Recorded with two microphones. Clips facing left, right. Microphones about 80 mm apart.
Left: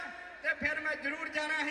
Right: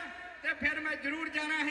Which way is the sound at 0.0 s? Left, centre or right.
Centre.